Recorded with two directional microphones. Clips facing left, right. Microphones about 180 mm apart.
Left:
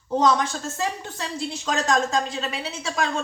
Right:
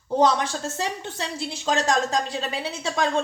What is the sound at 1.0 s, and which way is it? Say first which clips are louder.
Speech: even; 25° right (ahead or behind).